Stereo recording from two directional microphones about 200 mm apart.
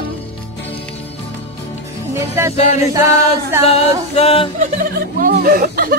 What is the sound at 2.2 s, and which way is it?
Music, 15° right (ahead or behind).